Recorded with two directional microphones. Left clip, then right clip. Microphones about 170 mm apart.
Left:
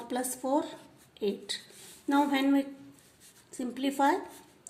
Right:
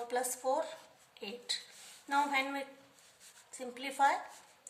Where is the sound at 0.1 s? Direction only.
35° left (ahead or behind).